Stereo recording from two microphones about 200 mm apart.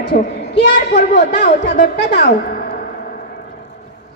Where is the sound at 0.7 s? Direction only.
55° left (ahead or behind).